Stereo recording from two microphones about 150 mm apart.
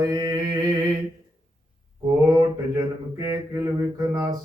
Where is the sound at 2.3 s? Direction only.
25° right (ahead or behind).